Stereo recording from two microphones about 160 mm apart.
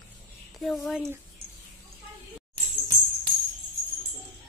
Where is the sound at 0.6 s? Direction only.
Centre (ahead or behind).